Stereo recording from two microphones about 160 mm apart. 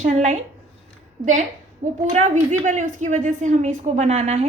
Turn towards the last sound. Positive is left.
turn(degrees=-45)  # may be behind; listen again after turning